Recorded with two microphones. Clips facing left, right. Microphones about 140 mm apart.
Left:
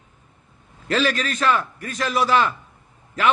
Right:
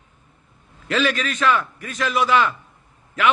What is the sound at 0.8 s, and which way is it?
A man's voice, 35° left (ahead or behind).